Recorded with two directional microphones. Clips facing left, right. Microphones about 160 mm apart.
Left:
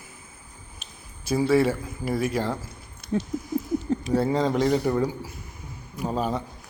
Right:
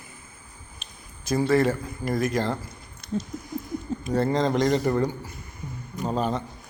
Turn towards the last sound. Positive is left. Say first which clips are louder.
# right 1 dB
turn(degrees=5)  # may be behind; listen again after turning